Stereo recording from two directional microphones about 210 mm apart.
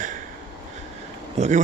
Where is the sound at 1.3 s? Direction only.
35° right (ahead or behind).